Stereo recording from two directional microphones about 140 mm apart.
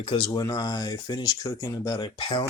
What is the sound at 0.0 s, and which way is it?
Speech, 40° left (ahead or behind).